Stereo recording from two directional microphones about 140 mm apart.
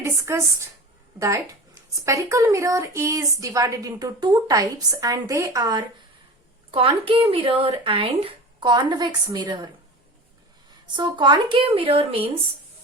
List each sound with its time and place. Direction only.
0.0 s a sound: 20° right (ahead or behind)
1.2 s a woman's voice: 25° right (ahead or behind)
6.7 s speech: 40° right (ahead or behind)
10.9 s speech: 30° right (ahead or behind)